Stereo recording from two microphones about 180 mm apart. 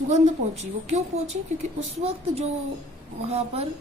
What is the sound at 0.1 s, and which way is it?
A woman's voice, 40° right (ahead or behind).